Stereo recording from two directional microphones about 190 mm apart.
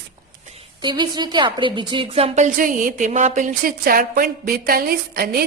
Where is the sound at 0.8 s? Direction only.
25° right (ahead or behind).